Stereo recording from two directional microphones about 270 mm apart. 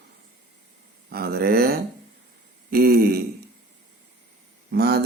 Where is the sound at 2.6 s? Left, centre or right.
Right.